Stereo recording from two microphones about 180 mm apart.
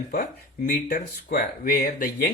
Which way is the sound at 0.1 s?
50° left (ahead or behind).